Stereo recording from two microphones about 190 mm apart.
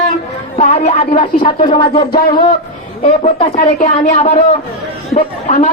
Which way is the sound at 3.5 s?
40° left (ahead or behind).